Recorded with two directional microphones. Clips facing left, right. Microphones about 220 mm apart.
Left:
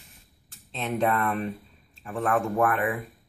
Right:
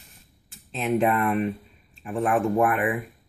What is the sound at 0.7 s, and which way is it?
Speech, 15° right (ahead or behind).